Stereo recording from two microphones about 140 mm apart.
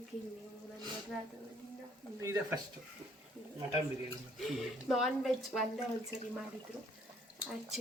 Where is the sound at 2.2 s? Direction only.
20° right (ahead or behind).